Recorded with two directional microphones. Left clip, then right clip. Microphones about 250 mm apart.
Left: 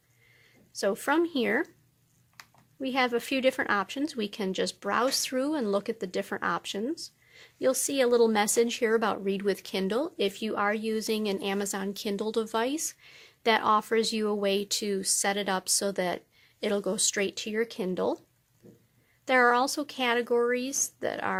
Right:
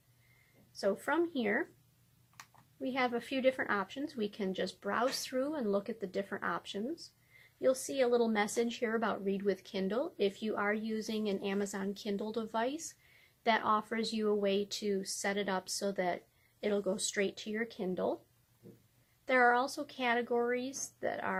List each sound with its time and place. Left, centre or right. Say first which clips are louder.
0.8 s speech: left 6 dB; left
2.8 s speech: left 7 dB; left
19.2 s speech: left 5 dB; left